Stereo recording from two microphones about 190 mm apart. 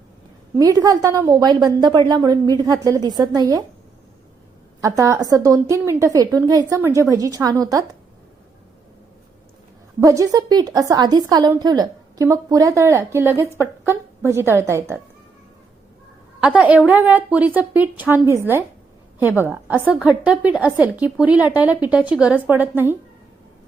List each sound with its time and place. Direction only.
0.5 s a woman's voice: 20° right (ahead or behind)
4.8 s a woman's voice: 15° right (ahead or behind)
10.0 s a woman's voice: 15° right (ahead or behind)
16.4 s a woman's voice: 5° right (ahead or behind)